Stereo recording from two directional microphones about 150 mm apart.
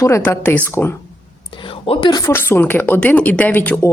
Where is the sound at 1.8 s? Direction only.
30° left (ahead or behind).